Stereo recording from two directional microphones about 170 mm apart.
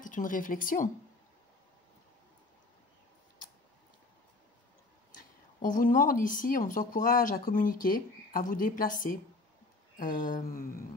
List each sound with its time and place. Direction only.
0.0 s speech: 50° left (ahead or behind)
5.6 s speech: 50° left (ahead or behind)